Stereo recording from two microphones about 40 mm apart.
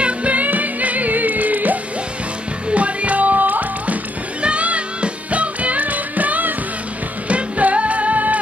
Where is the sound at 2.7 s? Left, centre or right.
Right.